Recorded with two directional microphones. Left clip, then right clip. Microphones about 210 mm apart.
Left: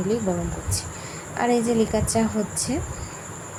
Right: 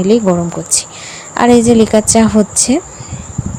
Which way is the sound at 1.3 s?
40° right (ahead or behind).